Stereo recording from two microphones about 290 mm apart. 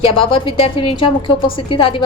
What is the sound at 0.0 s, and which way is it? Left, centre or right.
A woman's voice, centre.